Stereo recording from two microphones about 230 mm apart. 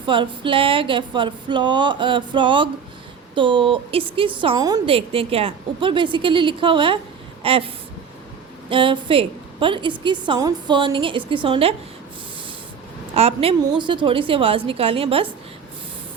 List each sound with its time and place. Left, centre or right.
0.0 s a woman's voice: right
8.7 s a woman's voice: right
13.1 s a woman's voice: right